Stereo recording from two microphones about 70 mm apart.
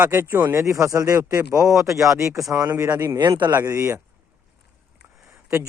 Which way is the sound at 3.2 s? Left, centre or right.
Right.